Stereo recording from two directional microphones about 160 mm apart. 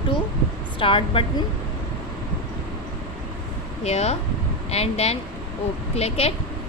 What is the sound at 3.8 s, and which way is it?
A woman's voice, 40° left (ahead or behind).